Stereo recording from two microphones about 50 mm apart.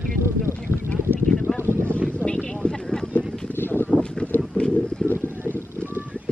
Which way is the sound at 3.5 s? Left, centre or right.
Left.